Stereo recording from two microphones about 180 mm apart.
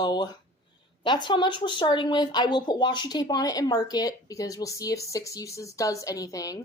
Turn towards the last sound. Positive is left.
turn(degrees=20)  # may be behind; listen again after turning